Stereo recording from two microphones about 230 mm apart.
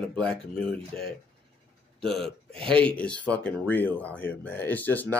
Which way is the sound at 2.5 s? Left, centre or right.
Right.